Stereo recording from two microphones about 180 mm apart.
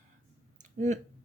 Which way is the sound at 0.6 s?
40° right (ahead or behind).